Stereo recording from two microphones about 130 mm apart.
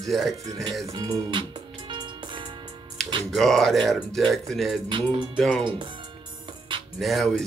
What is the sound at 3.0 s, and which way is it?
Music, centre (ahead or behind).